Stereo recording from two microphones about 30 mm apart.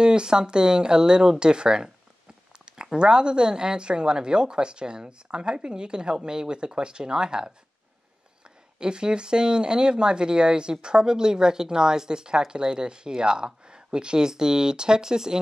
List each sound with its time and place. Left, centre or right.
0.0 s speech: right
8.7 s speech: right